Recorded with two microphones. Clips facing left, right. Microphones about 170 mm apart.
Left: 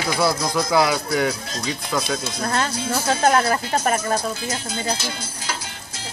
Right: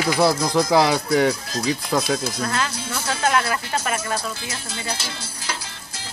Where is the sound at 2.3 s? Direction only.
40° left (ahead or behind).